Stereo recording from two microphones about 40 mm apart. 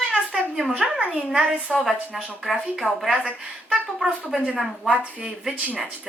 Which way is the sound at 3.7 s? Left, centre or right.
Centre.